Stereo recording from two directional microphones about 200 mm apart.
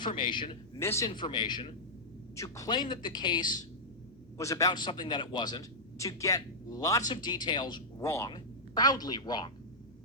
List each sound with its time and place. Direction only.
0.0 s a man's voice: 25° left (ahead or behind)